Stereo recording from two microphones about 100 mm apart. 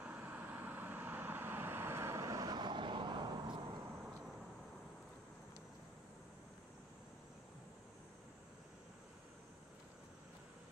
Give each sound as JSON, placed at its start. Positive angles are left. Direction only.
{"t": 0.0, "sound": "vehicle", "side_deg": -15}